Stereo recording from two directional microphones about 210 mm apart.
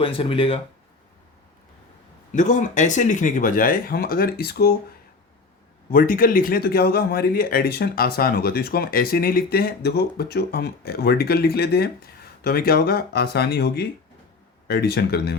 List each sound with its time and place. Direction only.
0.0 s speech: 25° left (ahead or behind)
2.3 s speech: 35° left (ahead or behind)
5.9 s speech: 40° left (ahead or behind)